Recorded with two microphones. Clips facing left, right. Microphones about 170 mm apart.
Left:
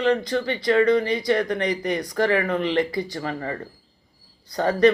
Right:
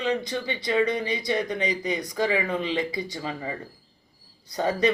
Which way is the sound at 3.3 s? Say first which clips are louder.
Left 4 dB; 10° right (ahead or behind).